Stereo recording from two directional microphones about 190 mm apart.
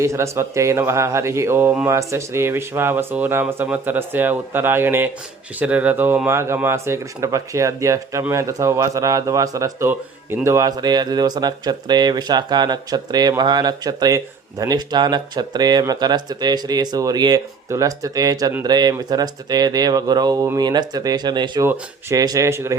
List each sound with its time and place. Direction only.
0.0 s speech: 15° right (ahead or behind)